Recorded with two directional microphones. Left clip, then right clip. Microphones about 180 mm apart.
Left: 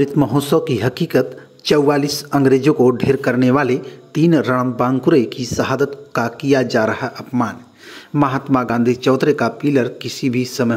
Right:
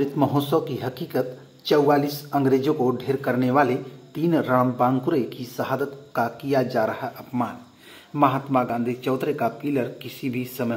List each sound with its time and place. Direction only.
0.0 s a man's voice: 40° left (ahead or behind)